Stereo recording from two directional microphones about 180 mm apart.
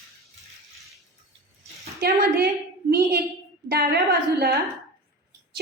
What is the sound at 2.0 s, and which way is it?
A woman's voice, 60° right (ahead or behind).